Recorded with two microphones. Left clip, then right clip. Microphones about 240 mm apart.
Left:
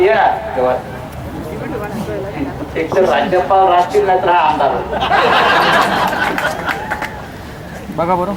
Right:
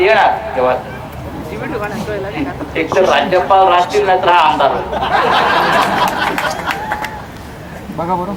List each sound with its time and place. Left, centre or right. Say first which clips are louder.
0.0 s speech: right 1 dB; centre
2.7 s speech: right 1 dB; centre
7.9 s speech: left 3 dB; left